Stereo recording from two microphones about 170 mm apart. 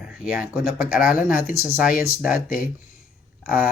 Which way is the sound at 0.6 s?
60° left (ahead or behind).